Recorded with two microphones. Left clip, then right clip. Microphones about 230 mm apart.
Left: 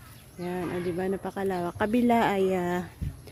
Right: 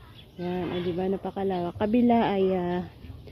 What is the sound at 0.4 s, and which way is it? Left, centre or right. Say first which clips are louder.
Speech: right 1 dB; left.